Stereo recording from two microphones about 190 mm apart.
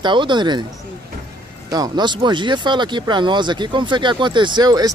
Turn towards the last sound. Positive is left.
turn(degrees=-20)  # may be behind; listen again after turning